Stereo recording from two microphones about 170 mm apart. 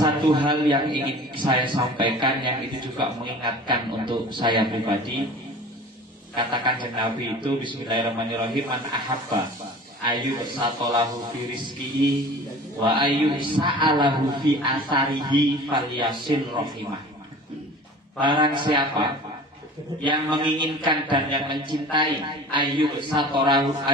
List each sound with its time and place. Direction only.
0.0 s a man's voice: 25° right (ahead or behind)
6.3 s a man's voice: 30° right (ahead or behind)
12.8 s a man's voice: 30° right (ahead or behind)
18.2 s a man's voice: 30° right (ahead or behind)